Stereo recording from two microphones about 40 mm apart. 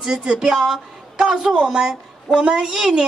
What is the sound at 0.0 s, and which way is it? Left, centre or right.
A woman's voice, centre.